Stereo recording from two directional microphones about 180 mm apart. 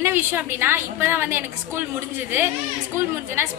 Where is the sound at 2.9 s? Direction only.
15° right (ahead or behind).